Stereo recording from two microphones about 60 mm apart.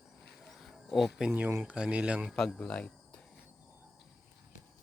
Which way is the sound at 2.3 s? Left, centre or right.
Centre.